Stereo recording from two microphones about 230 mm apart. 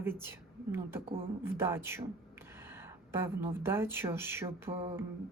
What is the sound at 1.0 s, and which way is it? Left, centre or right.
Speech, right.